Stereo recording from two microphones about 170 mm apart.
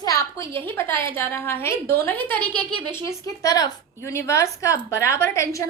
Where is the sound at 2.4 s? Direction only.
25° right (ahead or behind).